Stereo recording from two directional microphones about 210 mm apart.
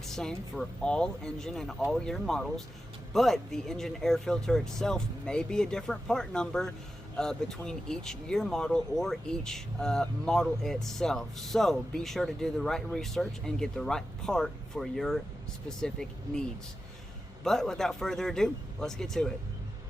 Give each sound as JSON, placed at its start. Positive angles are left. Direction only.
{"t": 0.0, "sound": "speech", "side_deg": 0}